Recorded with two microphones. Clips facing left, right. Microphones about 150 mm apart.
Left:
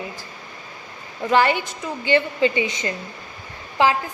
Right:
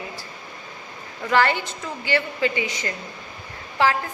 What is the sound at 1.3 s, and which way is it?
A woman's voice, 15° left (ahead or behind).